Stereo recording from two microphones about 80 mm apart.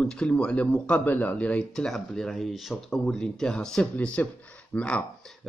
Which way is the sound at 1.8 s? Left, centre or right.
Centre.